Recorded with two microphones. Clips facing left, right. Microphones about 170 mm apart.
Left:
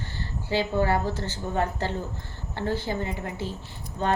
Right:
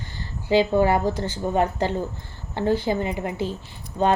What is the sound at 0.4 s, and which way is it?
A woman's voice, 15° right (ahead or behind).